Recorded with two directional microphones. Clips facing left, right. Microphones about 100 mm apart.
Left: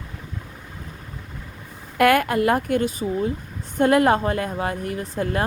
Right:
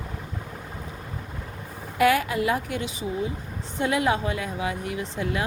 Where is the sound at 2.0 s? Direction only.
55° left (ahead or behind).